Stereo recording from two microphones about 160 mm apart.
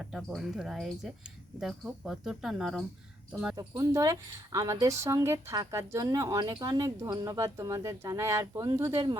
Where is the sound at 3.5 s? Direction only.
20° right (ahead or behind).